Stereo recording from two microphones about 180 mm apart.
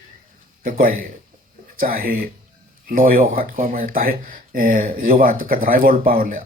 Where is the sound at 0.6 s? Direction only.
50° right (ahead or behind).